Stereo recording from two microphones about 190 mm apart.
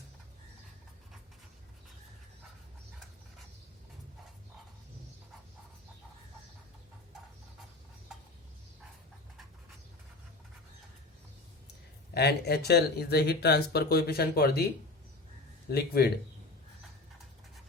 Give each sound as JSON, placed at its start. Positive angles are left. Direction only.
{"t": 12.1, "sound": "speech", "side_deg": 60}
{"t": 15.7, "sound": "speech", "side_deg": 55}